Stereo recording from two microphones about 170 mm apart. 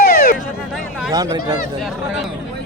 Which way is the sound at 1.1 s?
20° right (ahead or behind).